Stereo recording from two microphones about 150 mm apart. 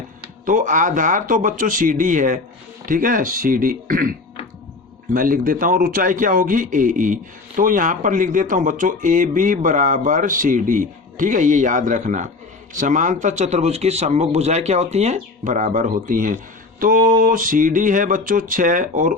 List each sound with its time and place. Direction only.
0.4 s speech: 60° right (ahead or behind)
5.1 s a man's voice: 70° right (ahead or behind)